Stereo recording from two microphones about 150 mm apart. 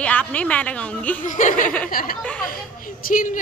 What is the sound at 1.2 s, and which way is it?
Speech, 60° left (ahead or behind).